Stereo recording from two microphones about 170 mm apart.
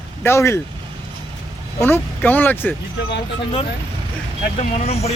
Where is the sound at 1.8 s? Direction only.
10° left (ahead or behind).